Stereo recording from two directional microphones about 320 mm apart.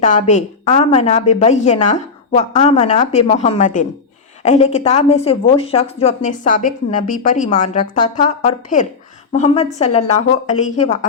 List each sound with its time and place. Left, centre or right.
0.0 s a woman's voice: left